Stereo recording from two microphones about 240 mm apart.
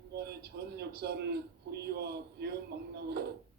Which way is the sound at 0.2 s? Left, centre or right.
Right.